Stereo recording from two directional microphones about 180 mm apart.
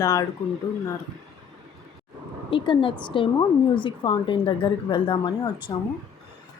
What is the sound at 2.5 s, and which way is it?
A woman's voice, 30° left (ahead or behind).